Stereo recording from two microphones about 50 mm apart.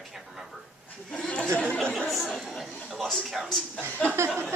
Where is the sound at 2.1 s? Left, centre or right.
Centre.